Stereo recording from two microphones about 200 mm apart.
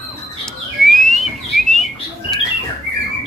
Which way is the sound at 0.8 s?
Centre (ahead or behind).